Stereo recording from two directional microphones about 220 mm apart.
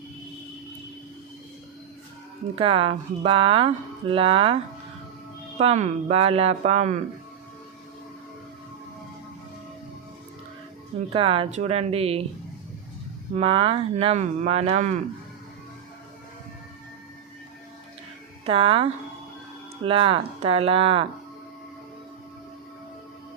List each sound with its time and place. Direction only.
2.6 s speech: 25° right (ahead or behind)
11.1 s speech: 25° right (ahead or behind)
13.3 s speech: 25° right (ahead or behind)
18.4 s speech: 25° right (ahead or behind)